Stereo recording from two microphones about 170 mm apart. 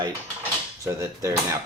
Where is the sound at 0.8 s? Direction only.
15° right (ahead or behind).